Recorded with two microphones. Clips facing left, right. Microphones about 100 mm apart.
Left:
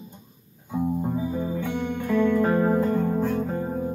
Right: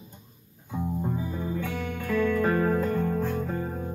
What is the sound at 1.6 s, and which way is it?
Music, 25° left (ahead or behind).